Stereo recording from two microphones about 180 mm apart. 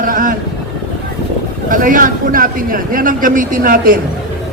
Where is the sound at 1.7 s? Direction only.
50° right (ahead or behind).